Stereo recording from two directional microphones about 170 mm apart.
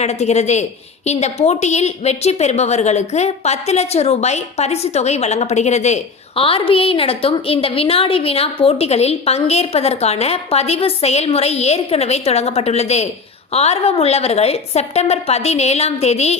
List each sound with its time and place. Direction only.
0.0 s a woman's voice: 40° left (ahead or behind)